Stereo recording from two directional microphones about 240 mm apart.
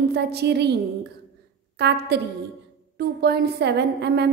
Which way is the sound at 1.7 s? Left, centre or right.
Right.